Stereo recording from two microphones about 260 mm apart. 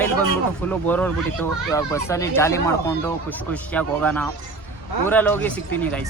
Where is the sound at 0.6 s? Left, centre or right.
Centre.